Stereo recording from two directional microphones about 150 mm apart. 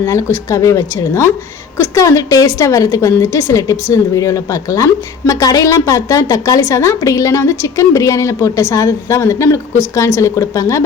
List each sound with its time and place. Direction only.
0.0 s a woman's voice: 20° left (ahead or behind)